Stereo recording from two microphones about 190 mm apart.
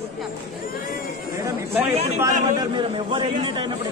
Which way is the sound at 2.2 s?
25° right (ahead or behind).